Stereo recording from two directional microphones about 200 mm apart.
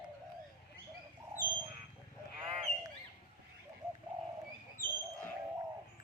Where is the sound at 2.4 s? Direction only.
25° right (ahead or behind).